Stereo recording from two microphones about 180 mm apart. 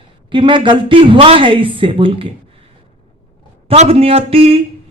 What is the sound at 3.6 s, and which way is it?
Speech, 35° right (ahead or behind).